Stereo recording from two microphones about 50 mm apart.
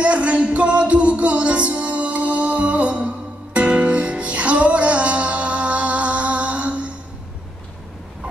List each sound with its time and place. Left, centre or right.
0.0 s music: right